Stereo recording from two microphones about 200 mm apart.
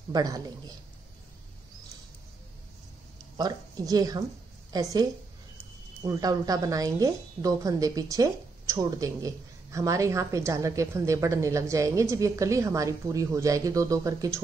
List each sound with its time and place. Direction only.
0.1 s a man's voice: 20° right (ahead or behind)
3.3 s a woman's voice: 20° right (ahead or behind)
6.0 s a woman's voice: 20° right (ahead or behind)